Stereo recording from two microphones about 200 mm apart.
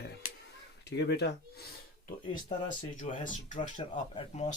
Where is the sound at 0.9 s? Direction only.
55° left (ahead or behind).